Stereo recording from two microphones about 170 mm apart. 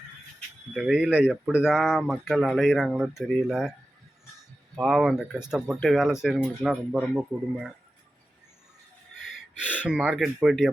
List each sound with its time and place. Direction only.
0.7 s speech: 5° right (ahead or behind)
9.8 s speech: 5° right (ahead or behind)